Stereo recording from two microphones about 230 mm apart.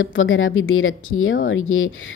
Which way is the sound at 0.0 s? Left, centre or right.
Left.